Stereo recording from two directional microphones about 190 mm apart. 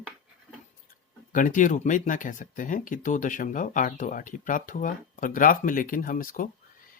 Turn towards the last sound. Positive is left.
turn(degrees=45)  # may be behind; listen again after turning